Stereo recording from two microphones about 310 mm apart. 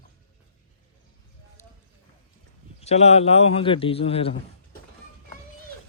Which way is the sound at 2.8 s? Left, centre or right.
Left.